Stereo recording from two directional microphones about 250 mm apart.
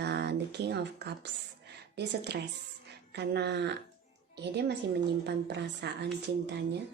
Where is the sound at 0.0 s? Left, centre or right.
Right.